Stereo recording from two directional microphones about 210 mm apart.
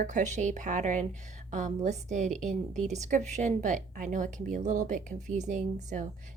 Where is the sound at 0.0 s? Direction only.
35° right (ahead or behind).